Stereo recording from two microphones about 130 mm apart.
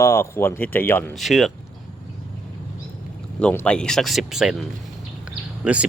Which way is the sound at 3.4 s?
15° left (ahead or behind).